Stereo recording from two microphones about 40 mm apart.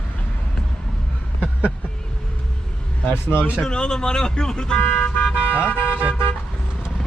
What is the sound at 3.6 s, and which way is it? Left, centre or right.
Speech, centre.